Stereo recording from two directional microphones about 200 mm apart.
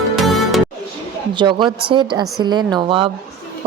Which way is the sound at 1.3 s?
25° right (ahead or behind).